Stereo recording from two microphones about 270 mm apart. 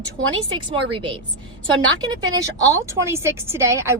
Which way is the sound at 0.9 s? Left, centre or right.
Centre.